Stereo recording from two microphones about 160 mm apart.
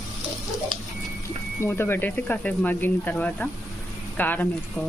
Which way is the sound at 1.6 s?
15° left (ahead or behind).